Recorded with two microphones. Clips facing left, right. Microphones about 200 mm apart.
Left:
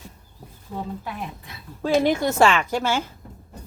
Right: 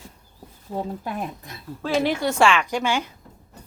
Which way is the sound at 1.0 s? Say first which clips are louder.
Right 3 dB; 45° right (ahead or behind).